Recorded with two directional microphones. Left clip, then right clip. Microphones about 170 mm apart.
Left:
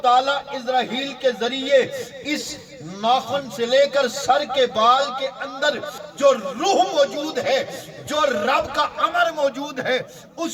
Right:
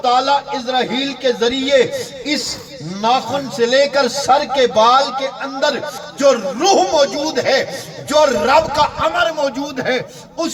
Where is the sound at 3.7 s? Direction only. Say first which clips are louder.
Right 2 dB; 30° left (ahead or behind).